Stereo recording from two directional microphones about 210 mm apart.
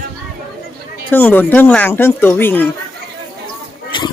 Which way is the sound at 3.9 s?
25° left (ahead or behind).